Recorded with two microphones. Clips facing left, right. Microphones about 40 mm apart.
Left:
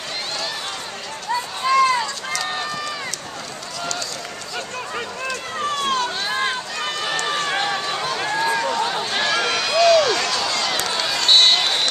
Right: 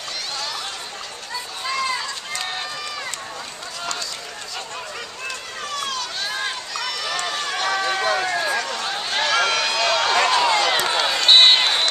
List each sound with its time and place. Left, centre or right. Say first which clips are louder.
1.3 s run: left 9 dB; centre
5.6 s run: left 7 dB; left
6.2 s run: left 4 dB; left
8.2 s run: left 1 dB; centre
8.5 s run: left 4 dB; left
8.8 s a sound: left 1 dB; centre
11.2 s run: right 2 dB; right